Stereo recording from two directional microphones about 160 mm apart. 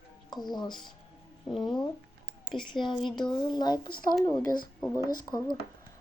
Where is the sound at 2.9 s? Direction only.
30° left (ahead or behind).